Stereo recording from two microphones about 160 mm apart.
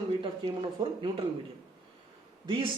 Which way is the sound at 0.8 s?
25° right (ahead or behind).